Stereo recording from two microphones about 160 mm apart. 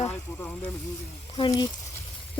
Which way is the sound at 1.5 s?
25° left (ahead or behind).